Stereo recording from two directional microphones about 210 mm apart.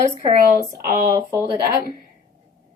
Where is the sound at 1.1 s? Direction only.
15° right (ahead or behind).